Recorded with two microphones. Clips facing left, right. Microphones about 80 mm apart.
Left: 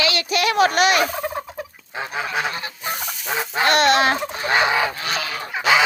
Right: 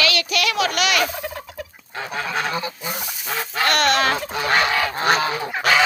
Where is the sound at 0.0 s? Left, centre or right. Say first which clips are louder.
Left 1 dB; left.